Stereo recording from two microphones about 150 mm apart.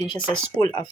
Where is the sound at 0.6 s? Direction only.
Centre (ahead or behind).